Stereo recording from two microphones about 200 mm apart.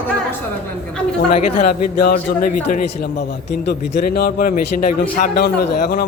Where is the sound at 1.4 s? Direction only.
40° left (ahead or behind).